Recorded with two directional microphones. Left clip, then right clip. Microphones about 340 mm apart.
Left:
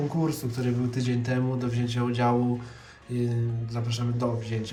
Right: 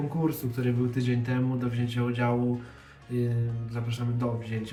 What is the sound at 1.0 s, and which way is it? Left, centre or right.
Speech, centre.